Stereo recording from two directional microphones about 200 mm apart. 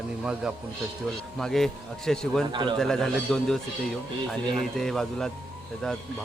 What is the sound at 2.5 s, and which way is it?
Speech, 25° right (ahead or behind).